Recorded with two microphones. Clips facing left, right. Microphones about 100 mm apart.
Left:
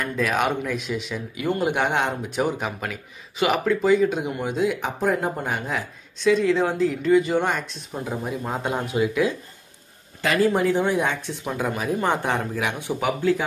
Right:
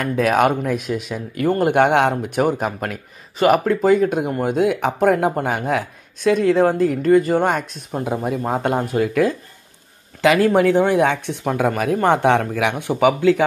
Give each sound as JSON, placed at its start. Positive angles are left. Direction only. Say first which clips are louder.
{"t": 0.0, "sound": "speech", "louder": "right 7 dB", "side_deg": -60}
{"t": 10.2, "sound": "speech", "louder": "right 6 dB", "side_deg": -75}
{"t": 13.0, "sound": "speech", "louder": "right 8 dB", "side_deg": -80}